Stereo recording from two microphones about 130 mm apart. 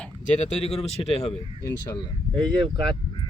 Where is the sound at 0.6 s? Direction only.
50° left (ahead or behind).